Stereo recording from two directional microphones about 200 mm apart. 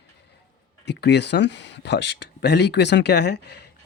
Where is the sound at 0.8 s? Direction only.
55° left (ahead or behind).